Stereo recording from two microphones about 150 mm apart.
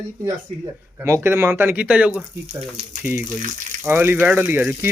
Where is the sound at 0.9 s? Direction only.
20° right (ahead or behind).